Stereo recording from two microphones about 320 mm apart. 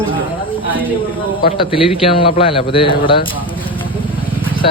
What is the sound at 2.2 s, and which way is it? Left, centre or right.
A man's voice, centre.